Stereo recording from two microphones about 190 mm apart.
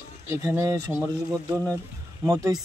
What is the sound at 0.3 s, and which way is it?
Speech, 15° right (ahead or behind).